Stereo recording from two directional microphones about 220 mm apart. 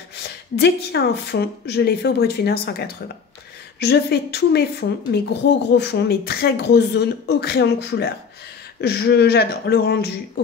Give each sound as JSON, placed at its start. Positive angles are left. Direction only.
{"t": 0.2, "sound": "a woman's voice", "side_deg": 50}